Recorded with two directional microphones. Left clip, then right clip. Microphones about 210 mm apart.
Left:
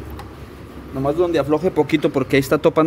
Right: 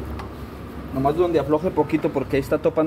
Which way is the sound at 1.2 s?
55° left (ahead or behind).